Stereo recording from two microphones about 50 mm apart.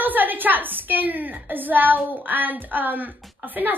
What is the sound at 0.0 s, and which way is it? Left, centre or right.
A woman's voice, right.